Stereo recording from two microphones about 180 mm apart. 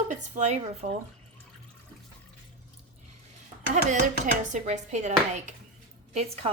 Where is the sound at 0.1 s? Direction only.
40° right (ahead or behind).